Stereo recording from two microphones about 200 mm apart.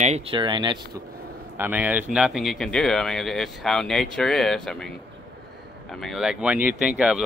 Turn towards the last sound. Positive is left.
turn(degrees=-5)  # may be behind; listen again after turning